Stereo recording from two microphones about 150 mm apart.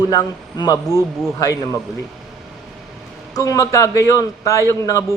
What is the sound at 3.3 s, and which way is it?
A man's voice, 25° left (ahead or behind).